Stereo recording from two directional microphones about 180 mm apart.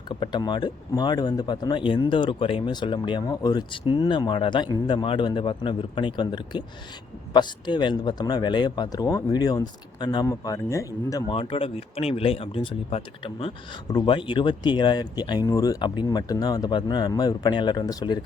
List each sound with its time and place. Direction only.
0.1 s speech: 25° left (ahead or behind)
11.3 s speech: 30° left (ahead or behind)